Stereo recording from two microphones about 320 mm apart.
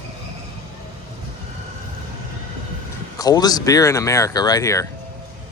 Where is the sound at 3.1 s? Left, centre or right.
Centre.